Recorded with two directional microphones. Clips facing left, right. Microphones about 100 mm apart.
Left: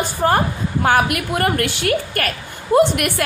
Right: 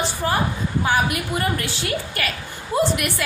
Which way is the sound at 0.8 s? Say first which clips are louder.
Left 5 dB; 60° left (ahead or behind).